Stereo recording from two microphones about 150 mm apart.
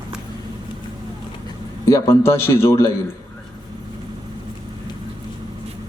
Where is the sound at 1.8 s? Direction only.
15° left (ahead or behind).